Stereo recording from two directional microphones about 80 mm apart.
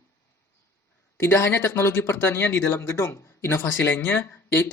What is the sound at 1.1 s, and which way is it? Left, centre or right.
Speech, left.